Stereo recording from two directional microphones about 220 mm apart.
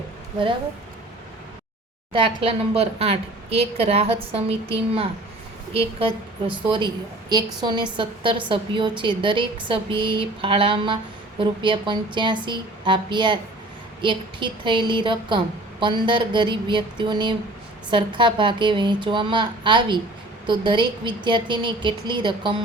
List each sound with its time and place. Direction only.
2.1 s a woman's voice: 25° right (ahead or behind)